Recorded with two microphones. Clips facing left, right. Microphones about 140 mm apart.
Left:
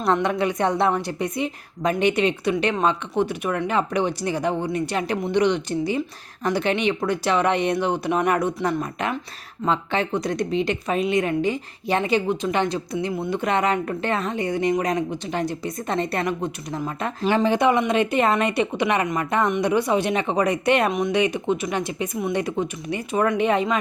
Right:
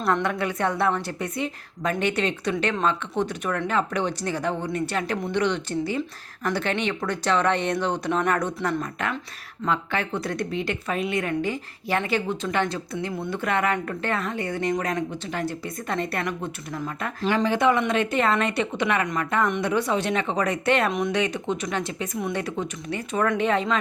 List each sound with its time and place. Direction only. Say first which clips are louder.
0.0 s speech: left 3 dB; 20° left (ahead or behind)
8.8 s a woman's voice: left 3 dB; 20° left (ahead or behind)